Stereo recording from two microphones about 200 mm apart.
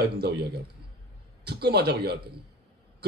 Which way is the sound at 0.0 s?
55° right (ahead or behind).